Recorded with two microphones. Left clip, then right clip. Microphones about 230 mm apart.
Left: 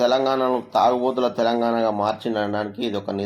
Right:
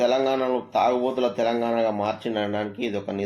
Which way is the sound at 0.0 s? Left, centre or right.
Left.